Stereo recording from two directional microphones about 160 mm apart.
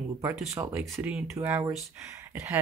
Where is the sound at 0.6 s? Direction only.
20° right (ahead or behind).